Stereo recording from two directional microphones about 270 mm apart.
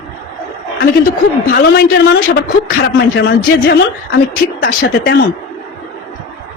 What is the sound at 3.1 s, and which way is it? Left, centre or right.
A man's voice, left.